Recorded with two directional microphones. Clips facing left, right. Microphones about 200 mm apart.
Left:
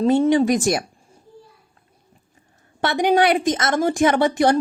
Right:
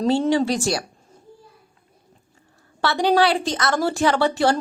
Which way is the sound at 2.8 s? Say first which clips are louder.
Left 1 dB; 20° left (ahead or behind).